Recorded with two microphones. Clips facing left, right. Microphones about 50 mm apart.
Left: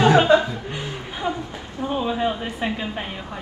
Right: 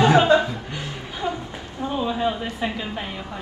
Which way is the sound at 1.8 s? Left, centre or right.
Centre.